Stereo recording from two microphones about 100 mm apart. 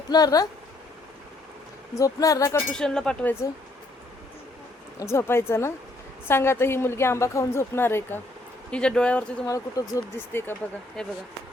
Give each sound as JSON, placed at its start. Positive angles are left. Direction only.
{"t": 0.1, "sound": "speech", "side_deg": 40}
{"t": 2.0, "sound": "speech", "side_deg": 35}
{"t": 2.7, "sound": "speech", "side_deg": 5}
{"t": 4.9, "sound": "a woman's voice", "side_deg": 25}
{"t": 8.7, "sound": "speech", "side_deg": 10}
{"t": 9.5, "sound": "speech", "side_deg": 35}
{"t": 10.2, "sound": "a woman's voice", "side_deg": 20}
{"t": 11.0, "sound": "speech", "side_deg": 5}